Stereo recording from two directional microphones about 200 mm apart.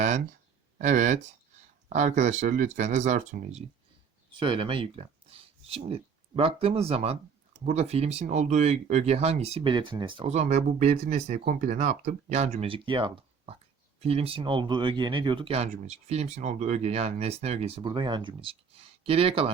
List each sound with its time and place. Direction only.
0.8 s speech: 35° right (ahead or behind)
4.4 s speech: 25° right (ahead or behind)